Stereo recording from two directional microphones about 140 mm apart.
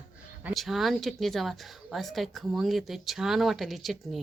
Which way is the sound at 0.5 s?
Centre (ahead or behind).